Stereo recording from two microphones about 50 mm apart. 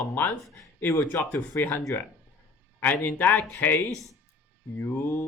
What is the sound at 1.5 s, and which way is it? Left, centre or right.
Speech, left.